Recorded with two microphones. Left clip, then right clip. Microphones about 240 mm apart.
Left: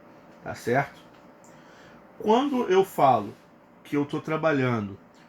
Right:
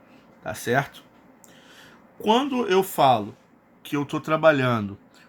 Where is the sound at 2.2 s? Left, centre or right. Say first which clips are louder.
Right 1 dB; right.